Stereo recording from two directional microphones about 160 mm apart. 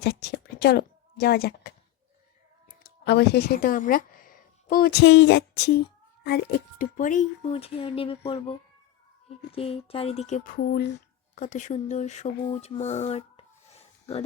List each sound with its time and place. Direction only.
0.0 s a woman's voice: 90° left
3.0 s a woman's voice: 90° left
11.3 s speech: 50° left (ahead or behind)
12.5 s a sound: 40° left (ahead or behind)